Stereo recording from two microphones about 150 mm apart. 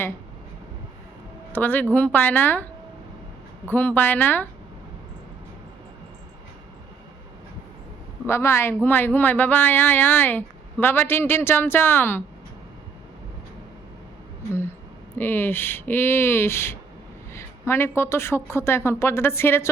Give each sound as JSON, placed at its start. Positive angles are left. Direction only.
{"t": 1.5, "sound": "speech", "side_deg": 10}
{"t": 3.7, "sound": "speech", "side_deg": 10}
{"t": 8.3, "sound": "speech", "side_deg": 15}
{"t": 15.2, "sound": "speech", "side_deg": 15}